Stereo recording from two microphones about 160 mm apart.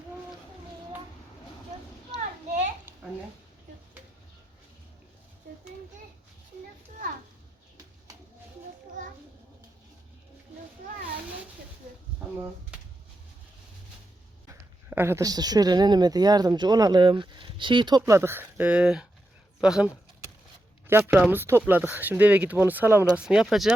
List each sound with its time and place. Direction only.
14.8 s speech: 15° right (ahead or behind)
21.0 s speech: 10° right (ahead or behind)